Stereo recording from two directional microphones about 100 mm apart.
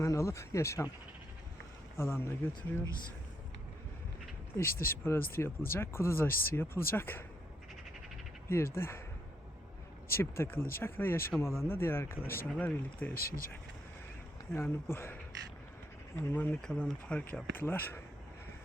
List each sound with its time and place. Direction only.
0.0 s speech: 30° left (ahead or behind)
2.0 s speech: 25° left (ahead or behind)
4.5 s speech: 25° left (ahead or behind)
8.4 s speech: 25° left (ahead or behind)
10.1 s speech: 25° left (ahead or behind)